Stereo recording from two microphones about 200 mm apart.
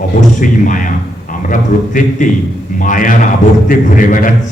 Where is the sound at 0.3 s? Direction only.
40° left (ahead or behind).